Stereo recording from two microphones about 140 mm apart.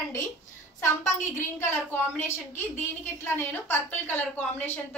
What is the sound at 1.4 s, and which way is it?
A woman's voice, 15° left (ahead or behind).